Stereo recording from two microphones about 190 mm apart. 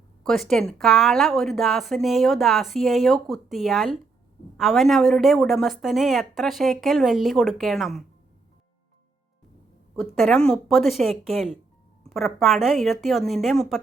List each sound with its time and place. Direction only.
0.2 s a woman's voice: centre (ahead or behind)
10.2 s a woman's voice: 5° left (ahead or behind)